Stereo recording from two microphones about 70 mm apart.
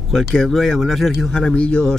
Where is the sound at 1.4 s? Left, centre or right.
Centre.